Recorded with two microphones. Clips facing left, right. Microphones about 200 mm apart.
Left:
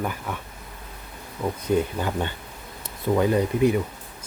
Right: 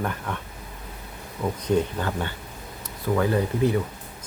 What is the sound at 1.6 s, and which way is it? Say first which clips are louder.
Speech: even; 5° left (ahead or behind).